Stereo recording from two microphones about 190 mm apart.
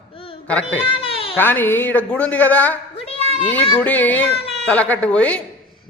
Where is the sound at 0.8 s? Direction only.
30° left (ahead or behind).